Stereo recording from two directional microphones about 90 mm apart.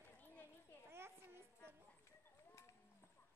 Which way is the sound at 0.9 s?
25° right (ahead or behind).